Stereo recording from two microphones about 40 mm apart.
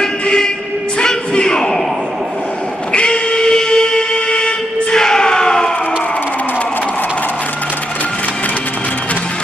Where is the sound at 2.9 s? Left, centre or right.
Left.